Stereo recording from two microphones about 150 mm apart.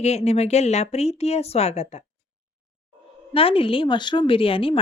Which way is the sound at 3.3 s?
40° left (ahead or behind).